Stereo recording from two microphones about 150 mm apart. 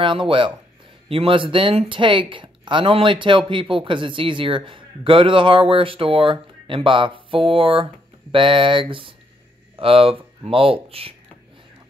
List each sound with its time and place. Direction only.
0.0 s speech: 35° right (ahead or behind)